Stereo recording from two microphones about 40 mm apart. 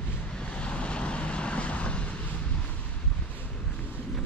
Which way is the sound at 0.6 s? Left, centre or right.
Left.